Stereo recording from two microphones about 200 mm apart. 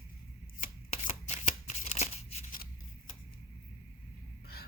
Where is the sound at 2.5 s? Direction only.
45° left (ahead or behind).